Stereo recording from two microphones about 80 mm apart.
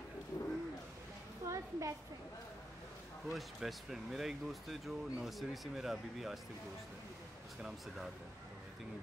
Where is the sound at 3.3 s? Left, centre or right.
Centre.